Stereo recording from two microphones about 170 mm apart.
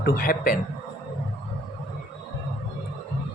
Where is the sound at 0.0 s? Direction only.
55° left (ahead or behind).